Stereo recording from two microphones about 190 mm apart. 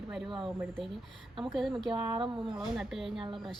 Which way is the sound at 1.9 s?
25° right (ahead or behind).